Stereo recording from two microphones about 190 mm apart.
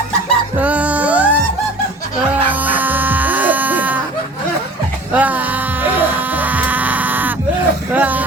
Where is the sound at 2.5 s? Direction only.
10° right (ahead or behind).